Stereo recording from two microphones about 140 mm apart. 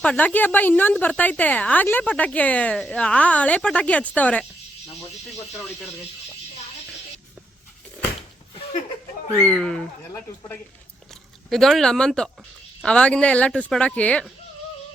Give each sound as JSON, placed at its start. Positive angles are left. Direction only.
{"t": 0.0, "sound": "a woman's voice", "side_deg": 10}
{"t": 9.4, "sound": "speech", "side_deg": 5}
{"t": 10.1, "sound": "a woman's voice", "side_deg": 15}
{"t": 11.1, "sound": "a woman's voice", "side_deg": 0}